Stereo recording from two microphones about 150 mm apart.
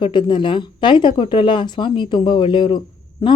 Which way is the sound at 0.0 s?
30° left (ahead or behind).